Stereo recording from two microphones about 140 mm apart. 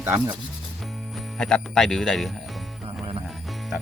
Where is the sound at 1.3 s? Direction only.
5° left (ahead or behind).